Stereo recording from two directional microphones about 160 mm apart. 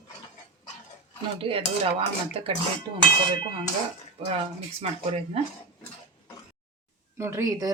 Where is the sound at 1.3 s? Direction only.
35° right (ahead or behind).